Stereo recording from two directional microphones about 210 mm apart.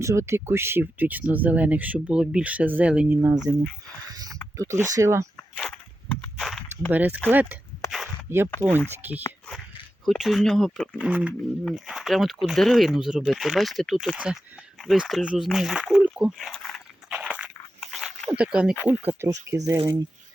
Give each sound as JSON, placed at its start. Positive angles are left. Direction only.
{"t": 0.0, "sound": "speech", "side_deg": -15}
{"t": 3.5, "sound": "speech", "side_deg": -20}
{"t": 4.1, "sound": "a sound", "side_deg": -15}
{"t": 4.5, "sound": "speech", "side_deg": -15}
{"t": 5.5, "sound": "a sound", "side_deg": 5}
{"t": 8.4, "sound": "speech", "side_deg": 5}
{"t": 9.0, "sound": "speech", "side_deg": -10}
{"t": 17.3, "sound": "a sound", "side_deg": -5}
{"t": 18.9, "sound": "speech", "side_deg": -10}